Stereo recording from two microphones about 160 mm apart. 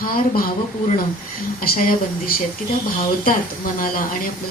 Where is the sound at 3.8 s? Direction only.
65° left (ahead or behind).